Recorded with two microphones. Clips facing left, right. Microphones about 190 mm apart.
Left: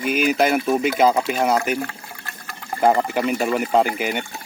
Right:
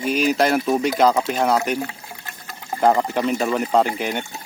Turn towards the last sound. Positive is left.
turn(degrees=5)  # may be behind; listen again after turning